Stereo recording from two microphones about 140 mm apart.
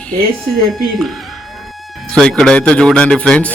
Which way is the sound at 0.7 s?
Centre (ahead or behind).